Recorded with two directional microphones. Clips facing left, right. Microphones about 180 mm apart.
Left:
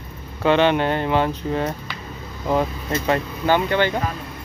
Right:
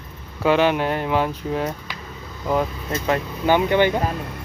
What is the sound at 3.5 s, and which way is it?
Speech, 15° right (ahead or behind).